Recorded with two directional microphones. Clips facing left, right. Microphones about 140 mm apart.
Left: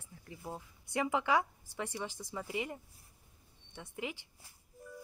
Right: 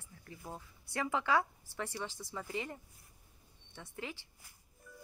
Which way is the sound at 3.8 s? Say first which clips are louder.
Left 3 dB; 15° left (ahead or behind).